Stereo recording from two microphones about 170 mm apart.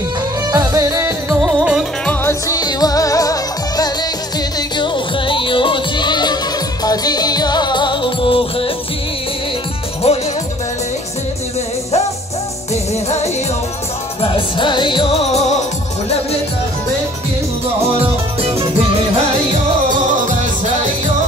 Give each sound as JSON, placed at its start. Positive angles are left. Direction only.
{"t": 0.5, "sound": "music", "side_deg": -20}
{"t": 1.4, "sound": "music", "side_deg": -5}
{"t": 2.0, "sound": "music", "side_deg": 15}
{"t": 10.0, "sound": "music", "side_deg": 35}
{"t": 14.2, "sound": "music", "side_deg": 30}
{"t": 17.9, "sound": "music", "side_deg": -35}